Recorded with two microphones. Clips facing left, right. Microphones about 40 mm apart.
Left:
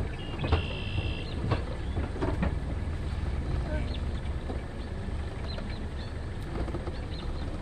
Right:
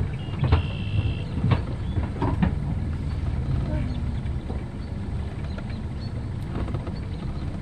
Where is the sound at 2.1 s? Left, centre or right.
Right.